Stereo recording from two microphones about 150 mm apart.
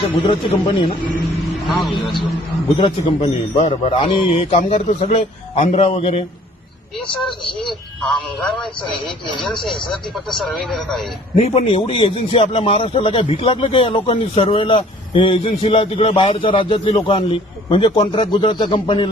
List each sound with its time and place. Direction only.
1.6 s a man's voice: centre (ahead or behind)
2.7 s a man's voice: 40° left (ahead or behind)
7.1 s speech: 5° left (ahead or behind)
11.3 s a man's voice: 40° left (ahead or behind)